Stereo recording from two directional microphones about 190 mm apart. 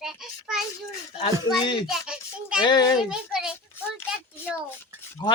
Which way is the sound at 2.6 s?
25° left (ahead or behind).